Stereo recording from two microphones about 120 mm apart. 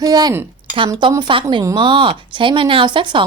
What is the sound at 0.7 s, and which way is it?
A woman's voice, 45° right (ahead or behind).